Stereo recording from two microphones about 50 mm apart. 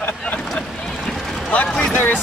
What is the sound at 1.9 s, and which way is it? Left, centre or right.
Speech, left.